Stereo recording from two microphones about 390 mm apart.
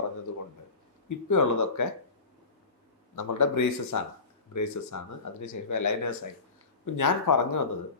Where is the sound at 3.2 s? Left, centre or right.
Left.